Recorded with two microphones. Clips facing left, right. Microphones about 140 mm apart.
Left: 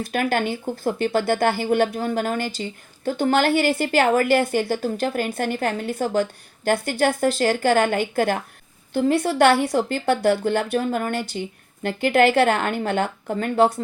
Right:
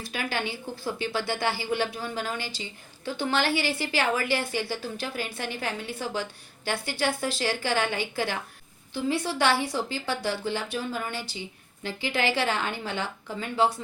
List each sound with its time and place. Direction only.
0.0 s speech: 50° left (ahead or behind)